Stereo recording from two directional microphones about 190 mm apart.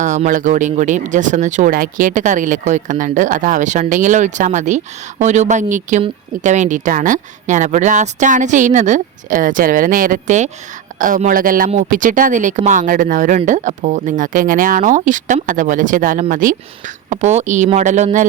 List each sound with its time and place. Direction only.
0.0 s speech: 40° right (ahead or behind)